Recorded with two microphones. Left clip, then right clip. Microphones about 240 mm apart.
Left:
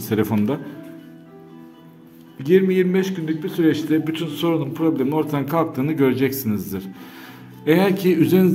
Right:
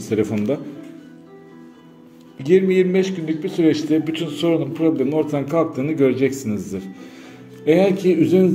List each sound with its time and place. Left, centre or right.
0.0 s speech: left
2.3 s a man's voice: centre